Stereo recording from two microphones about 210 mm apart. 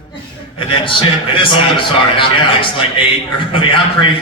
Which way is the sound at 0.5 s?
25° left (ahead or behind).